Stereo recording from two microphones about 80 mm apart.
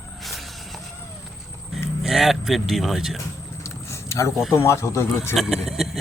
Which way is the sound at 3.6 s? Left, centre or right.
Left.